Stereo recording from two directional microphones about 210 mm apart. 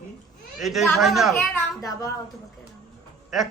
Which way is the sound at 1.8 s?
15° left (ahead or behind).